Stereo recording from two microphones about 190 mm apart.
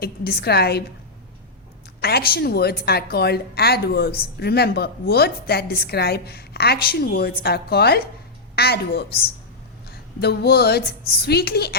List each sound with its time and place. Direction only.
0.0 s a woman's voice: 55° left (ahead or behind)
2.0 s a woman's voice: 55° left (ahead or behind)